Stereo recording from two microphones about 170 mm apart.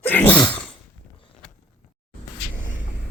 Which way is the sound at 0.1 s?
10° left (ahead or behind).